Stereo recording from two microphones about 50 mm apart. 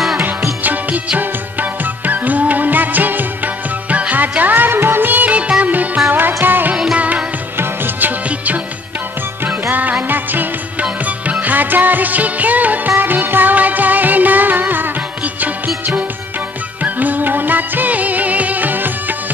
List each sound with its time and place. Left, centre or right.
1.1 s music: right
6.0 s music: right
7.0 s music: right
7.5 s music: right
9.7 s music: right